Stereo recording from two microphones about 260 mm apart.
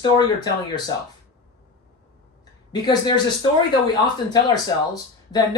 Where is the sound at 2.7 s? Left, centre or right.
Centre.